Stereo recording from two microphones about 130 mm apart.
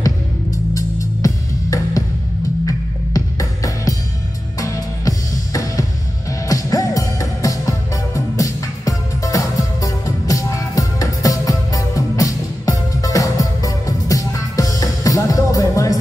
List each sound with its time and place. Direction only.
0.7 s music: 25° left (ahead or behind)